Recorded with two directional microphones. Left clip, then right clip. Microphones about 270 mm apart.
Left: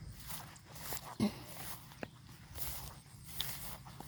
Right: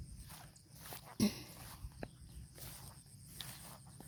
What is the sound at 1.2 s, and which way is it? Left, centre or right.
Dog, centre.